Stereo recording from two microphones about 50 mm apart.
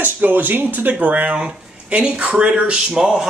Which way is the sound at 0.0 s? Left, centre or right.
Right.